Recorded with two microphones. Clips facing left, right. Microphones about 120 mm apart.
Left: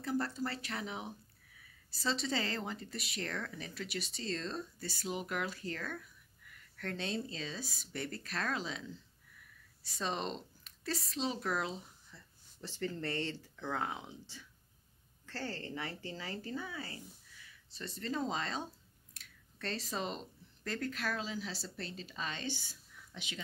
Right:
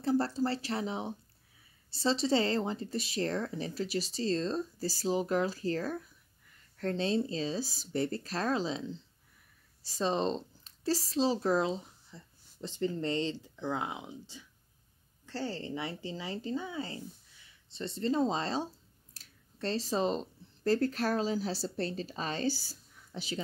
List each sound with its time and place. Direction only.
0.0 s speech: 30° right (ahead or behind)